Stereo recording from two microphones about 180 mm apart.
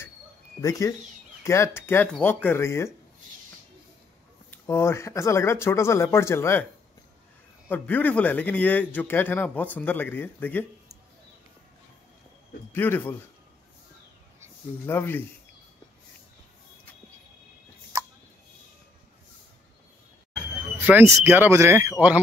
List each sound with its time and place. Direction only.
0.6 s a man's voice: 20° left (ahead or behind)
4.5 s a man's voice: 15° left (ahead or behind)
7.6 s a man's voice: 10° left (ahead or behind)
12.7 s a man's voice: 10° left (ahead or behind)
14.9 s a man's voice: 10° left (ahead or behind)
20.8 s speech: 10° right (ahead or behind)